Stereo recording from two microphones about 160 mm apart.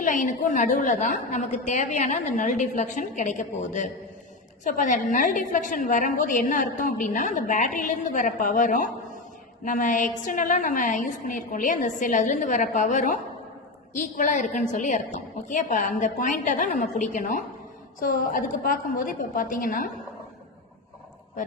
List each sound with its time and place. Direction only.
0.0 s a woman's voice: 55° left (ahead or behind)